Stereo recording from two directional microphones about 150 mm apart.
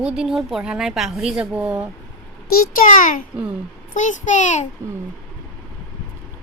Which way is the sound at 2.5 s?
70° left (ahead or behind).